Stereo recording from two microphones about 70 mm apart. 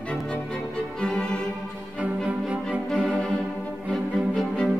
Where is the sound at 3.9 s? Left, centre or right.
Centre.